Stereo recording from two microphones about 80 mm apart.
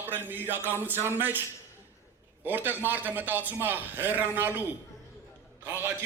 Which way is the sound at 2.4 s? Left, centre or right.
Right.